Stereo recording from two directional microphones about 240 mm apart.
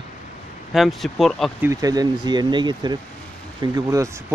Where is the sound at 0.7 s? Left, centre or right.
Centre.